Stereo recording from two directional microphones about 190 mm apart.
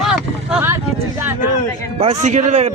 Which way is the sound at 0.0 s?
5° right (ahead or behind).